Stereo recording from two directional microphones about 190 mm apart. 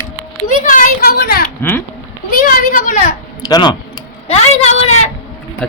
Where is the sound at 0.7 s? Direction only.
50° left (ahead or behind).